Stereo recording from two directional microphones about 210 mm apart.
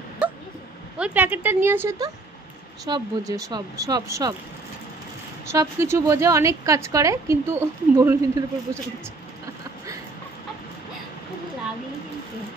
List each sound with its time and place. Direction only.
0.9 s a woman's voice: 5° right (ahead or behind)
5.5 s a woman's voice: 15° right (ahead or behind)